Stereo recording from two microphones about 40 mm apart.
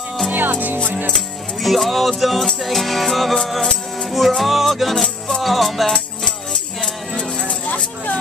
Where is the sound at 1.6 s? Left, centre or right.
Centre.